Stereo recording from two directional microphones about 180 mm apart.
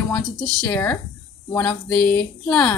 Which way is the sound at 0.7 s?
10° left (ahead or behind).